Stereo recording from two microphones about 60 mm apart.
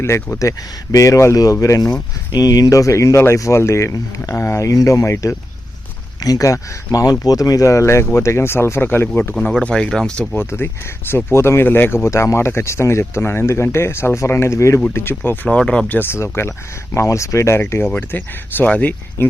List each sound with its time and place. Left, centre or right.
0.3 s speech: left
9.4 s speech: centre
10.3 s speech: left
14.9 s speech: left
15.4 s speech: centre
15.9 s speech: left
16.1 s speech: left
17.8 s speech: left
19.2 s speech: left